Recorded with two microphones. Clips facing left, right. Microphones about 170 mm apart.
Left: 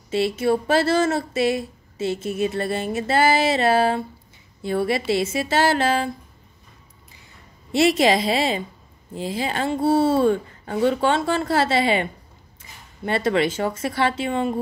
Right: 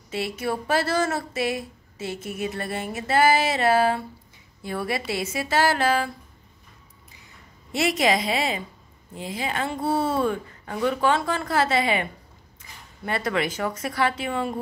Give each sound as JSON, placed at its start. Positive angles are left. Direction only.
{"t": 0.1, "sound": "speech", "side_deg": 30}
{"t": 7.7, "sound": "speech", "side_deg": 30}